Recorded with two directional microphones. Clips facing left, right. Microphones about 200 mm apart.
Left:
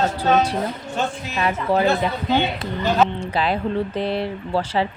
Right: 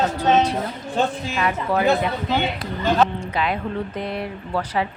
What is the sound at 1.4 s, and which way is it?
Speech, 30° left (ahead or behind).